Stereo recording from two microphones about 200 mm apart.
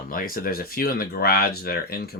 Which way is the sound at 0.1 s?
45° left (ahead or behind).